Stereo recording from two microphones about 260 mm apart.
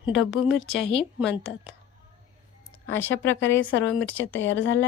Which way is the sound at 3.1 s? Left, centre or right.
Left.